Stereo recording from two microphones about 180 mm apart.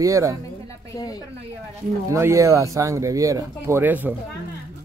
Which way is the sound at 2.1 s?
15° right (ahead or behind).